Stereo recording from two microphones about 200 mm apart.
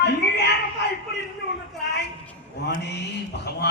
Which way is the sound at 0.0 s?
55° left (ahead or behind).